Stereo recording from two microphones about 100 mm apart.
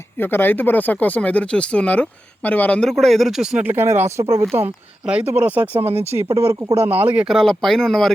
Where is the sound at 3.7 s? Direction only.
25° right (ahead or behind).